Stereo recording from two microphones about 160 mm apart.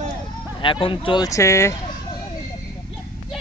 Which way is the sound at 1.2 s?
20° left (ahead or behind).